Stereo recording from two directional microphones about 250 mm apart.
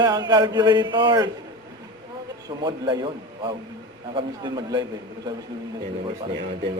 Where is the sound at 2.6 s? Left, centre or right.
Centre.